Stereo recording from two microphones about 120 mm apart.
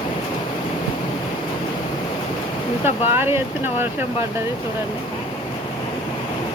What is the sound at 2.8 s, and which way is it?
Speech, 20° right (ahead or behind).